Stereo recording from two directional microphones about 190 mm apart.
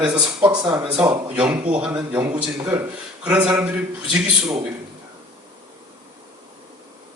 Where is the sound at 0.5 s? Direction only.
20° right (ahead or behind).